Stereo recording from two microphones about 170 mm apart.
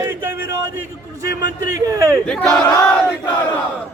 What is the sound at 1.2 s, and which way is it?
Speech, 20° right (ahead or behind).